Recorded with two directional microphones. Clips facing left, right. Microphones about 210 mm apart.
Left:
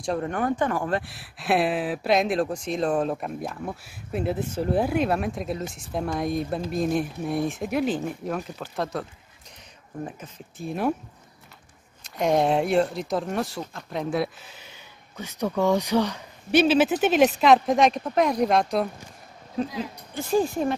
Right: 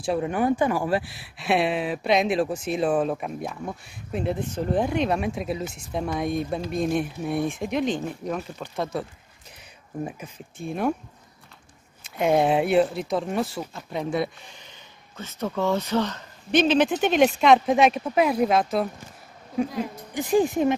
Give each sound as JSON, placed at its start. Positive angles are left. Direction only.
{"t": 0.0, "sound": "speech", "side_deg": -5}
{"t": 10.6, "sound": "speech", "side_deg": 0}
{"t": 12.0, "sound": "speech", "side_deg": -5}
{"t": 19.8, "sound": "speech", "side_deg": -15}